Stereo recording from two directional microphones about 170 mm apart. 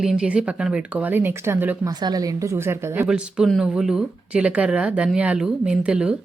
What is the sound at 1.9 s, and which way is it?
Speech, 25° right (ahead or behind).